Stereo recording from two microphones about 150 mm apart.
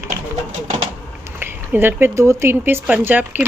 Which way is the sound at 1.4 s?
15° right (ahead or behind).